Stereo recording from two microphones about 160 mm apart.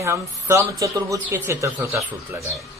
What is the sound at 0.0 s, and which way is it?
Speech, 15° right (ahead or behind).